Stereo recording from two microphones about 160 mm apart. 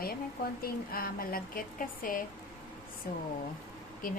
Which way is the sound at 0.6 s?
70° left (ahead or behind).